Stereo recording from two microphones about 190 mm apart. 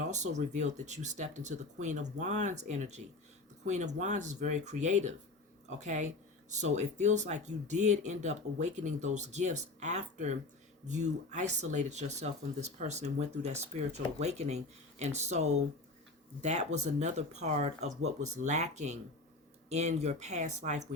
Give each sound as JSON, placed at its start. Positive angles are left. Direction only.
{"t": 0.0, "sound": "speech", "side_deg": -40}